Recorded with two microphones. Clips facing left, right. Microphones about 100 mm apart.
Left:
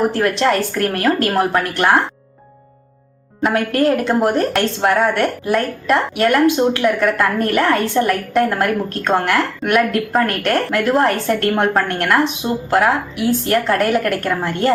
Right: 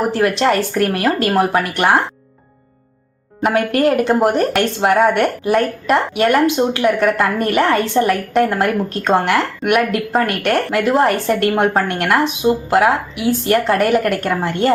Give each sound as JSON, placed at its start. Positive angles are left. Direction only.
{"t": 0.0, "sound": "a woman's voice", "side_deg": -20}
{"t": 3.4, "sound": "a woman's voice", "side_deg": -20}